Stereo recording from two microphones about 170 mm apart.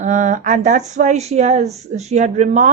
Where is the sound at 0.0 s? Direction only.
45° right (ahead or behind).